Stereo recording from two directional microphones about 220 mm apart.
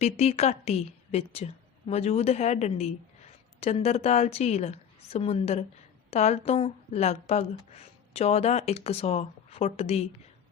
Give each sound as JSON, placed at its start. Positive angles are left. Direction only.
{"t": 0.0, "sound": "speech", "side_deg": 30}